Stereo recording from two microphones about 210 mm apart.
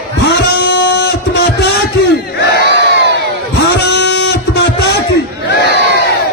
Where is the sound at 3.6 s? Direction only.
55° left (ahead or behind).